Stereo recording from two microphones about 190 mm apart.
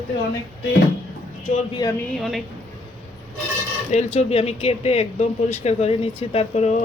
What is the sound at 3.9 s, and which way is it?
Speech, 35° left (ahead or behind).